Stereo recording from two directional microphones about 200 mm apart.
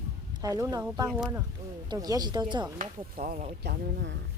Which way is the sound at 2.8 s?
45° right (ahead or behind).